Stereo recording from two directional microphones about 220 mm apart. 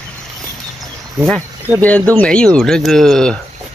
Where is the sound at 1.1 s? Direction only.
Centre (ahead or behind).